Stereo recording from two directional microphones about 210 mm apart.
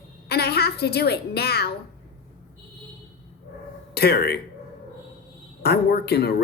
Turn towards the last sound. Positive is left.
turn(degrees=50)  # may be behind; listen again after turning